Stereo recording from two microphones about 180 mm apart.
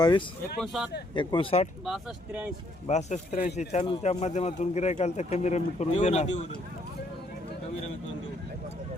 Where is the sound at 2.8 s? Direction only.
35° left (ahead or behind).